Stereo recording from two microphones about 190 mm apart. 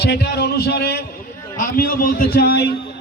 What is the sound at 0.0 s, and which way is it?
A man's voice, 60° left (ahead or behind).